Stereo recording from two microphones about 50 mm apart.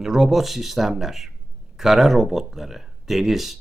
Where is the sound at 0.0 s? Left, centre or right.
Centre.